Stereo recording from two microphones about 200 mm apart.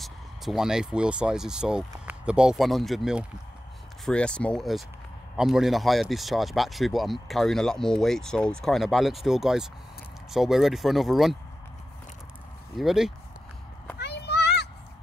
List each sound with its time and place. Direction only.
0.0 s speech: centre (ahead or behind)
12.7 s speech: centre (ahead or behind)
13.9 s a sound: 55° left (ahead or behind)